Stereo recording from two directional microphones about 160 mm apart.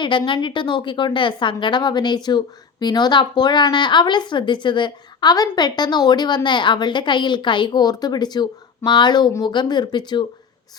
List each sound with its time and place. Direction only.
0.0 s a woman's voice: 30° left (ahead or behind)